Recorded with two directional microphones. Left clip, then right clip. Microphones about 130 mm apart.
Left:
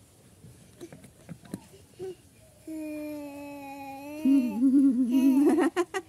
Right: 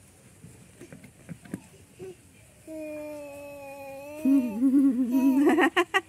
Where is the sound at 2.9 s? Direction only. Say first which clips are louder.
Even; 30° left (ahead or behind).